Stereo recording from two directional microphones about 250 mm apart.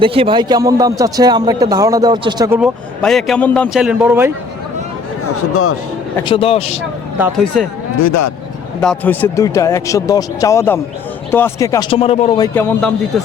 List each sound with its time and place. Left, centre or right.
0.0 s a man's voice: right
2.6 s speech: centre
5.2 s speech: left
6.1 s a man's voice: centre
7.2 s speech: centre
7.9 s speech: left
8.8 s speech: centre; by 12.5 s left
12.5 s speech: centre